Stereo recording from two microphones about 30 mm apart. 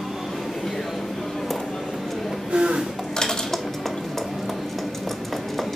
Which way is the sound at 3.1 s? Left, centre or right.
Centre.